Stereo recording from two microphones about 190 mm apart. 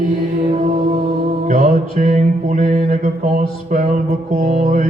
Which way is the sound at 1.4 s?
45° right (ahead or behind).